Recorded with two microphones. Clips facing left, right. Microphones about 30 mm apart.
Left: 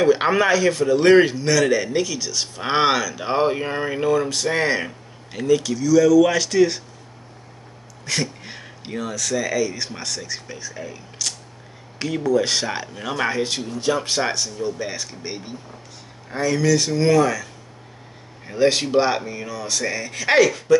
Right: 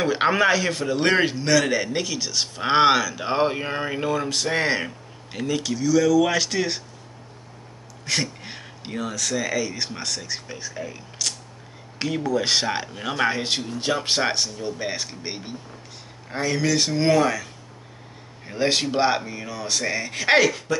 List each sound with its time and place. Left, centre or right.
0.0 s a man's voice: centre
8.0 s a man's voice: centre
13.4 s a man's voice: right
18.5 s a man's voice: centre